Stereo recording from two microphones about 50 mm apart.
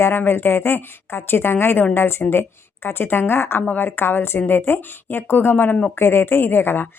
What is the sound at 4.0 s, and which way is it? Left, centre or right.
A woman's voice, left.